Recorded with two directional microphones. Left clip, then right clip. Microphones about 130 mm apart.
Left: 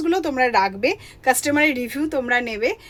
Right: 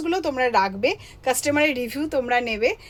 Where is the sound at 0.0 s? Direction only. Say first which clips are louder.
Left 3 dB; 40° left (ahead or behind).